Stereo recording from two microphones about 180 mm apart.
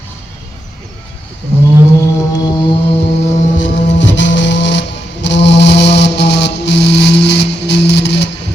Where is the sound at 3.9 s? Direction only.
80° left.